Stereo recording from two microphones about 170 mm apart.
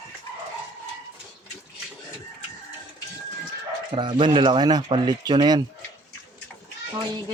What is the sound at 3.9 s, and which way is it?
Speech, 25° right (ahead or behind).